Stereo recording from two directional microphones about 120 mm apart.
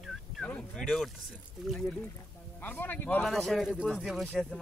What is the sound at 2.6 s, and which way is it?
Speech, 15° left (ahead or behind).